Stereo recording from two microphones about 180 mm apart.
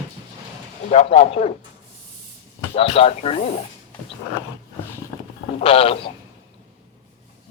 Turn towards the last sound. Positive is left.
turn(degrees=30)  # may be behind; listen again after turning